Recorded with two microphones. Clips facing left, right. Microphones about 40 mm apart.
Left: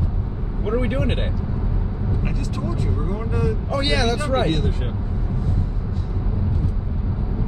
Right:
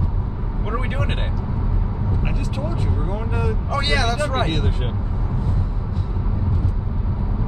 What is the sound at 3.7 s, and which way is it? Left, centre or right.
Speech, centre.